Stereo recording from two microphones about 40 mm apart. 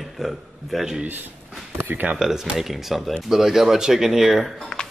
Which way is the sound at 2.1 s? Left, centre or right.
Centre.